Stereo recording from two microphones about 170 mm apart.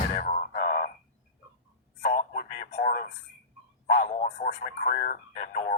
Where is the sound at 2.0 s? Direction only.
50° left (ahead or behind).